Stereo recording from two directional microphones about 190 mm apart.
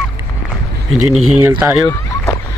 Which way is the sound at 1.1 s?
10° right (ahead or behind).